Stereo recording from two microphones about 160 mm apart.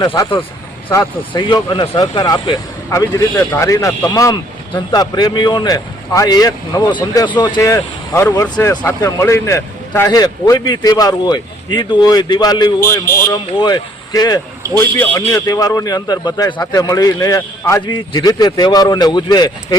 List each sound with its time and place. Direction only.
0.0 s a man's voice: 30° left (ahead or behind)
14.9 s speech: 10° left (ahead or behind)